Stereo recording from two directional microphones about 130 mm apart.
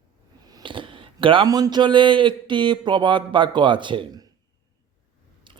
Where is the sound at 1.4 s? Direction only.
30° right (ahead or behind).